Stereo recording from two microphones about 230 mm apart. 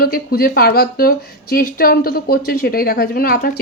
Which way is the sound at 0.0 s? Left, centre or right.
Left.